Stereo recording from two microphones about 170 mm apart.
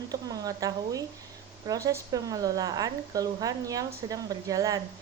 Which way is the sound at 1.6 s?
20° right (ahead or behind).